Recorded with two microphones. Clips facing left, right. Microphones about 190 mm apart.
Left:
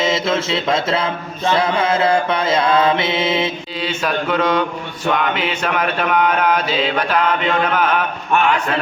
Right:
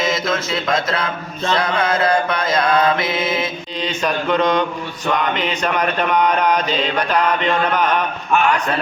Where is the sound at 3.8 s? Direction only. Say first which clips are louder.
Even; 5° left (ahead or behind).